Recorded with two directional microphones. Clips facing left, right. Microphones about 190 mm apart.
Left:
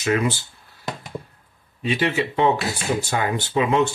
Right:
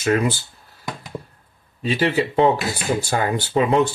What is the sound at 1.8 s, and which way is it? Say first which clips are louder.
Speech: right 2 dB; 35° right (ahead or behind).